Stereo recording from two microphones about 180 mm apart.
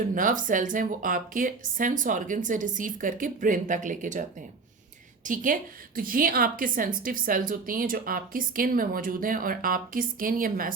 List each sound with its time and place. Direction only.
0.1 s a woman's voice: 50° right (ahead or behind)